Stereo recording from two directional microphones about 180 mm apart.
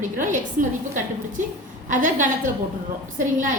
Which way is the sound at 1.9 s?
45° right (ahead or behind).